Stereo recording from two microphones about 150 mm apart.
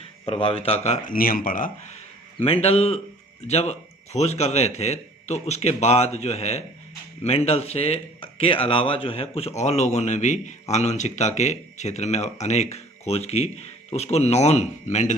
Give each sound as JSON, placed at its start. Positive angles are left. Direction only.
{"t": 0.3, "sound": "a man's voice", "side_deg": 40}
{"t": 1.0, "sound": "speech", "side_deg": 70}
{"t": 2.4, "sound": "a man's voice", "side_deg": 40}